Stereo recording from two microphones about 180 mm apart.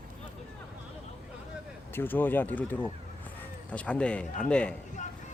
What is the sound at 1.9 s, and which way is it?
A man's voice, 10° left (ahead or behind).